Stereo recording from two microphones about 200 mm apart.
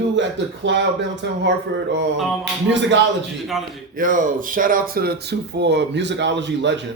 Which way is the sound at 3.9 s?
40° right (ahead or behind).